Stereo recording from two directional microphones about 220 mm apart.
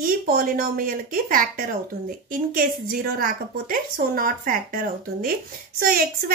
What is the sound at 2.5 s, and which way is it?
A woman's voice, 40° right (ahead or behind).